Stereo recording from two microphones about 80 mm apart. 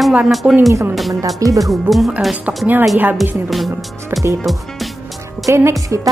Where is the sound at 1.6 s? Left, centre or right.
Centre.